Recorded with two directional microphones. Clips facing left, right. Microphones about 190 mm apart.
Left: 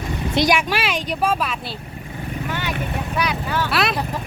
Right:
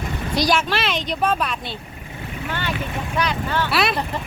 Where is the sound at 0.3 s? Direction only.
20° left (ahead or behind).